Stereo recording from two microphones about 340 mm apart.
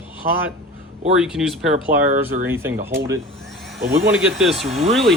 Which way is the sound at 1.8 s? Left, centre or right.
Right.